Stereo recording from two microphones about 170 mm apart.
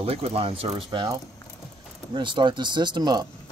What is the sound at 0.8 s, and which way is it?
Speech, 20° right (ahead or behind).